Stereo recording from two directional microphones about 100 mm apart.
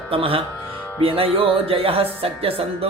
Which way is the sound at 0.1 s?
65° right (ahead or behind).